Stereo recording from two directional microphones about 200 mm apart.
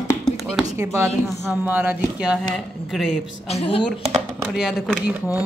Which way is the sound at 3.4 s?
30° left (ahead or behind).